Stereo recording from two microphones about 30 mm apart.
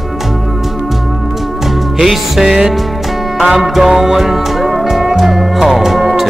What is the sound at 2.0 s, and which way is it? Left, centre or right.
Speech, centre.